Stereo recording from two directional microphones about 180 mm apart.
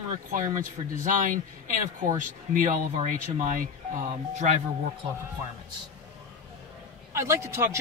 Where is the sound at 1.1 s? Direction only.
45° right (ahead or behind).